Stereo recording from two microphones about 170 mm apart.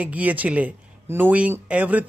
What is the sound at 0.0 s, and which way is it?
Speech, 10° right (ahead or behind).